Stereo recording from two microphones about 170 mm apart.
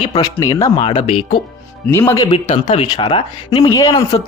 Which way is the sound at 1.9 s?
15° left (ahead or behind).